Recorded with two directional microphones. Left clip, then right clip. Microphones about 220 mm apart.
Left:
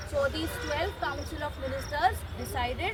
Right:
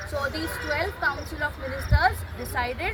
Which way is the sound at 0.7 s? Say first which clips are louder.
Right 6 dB; centre (ahead or behind).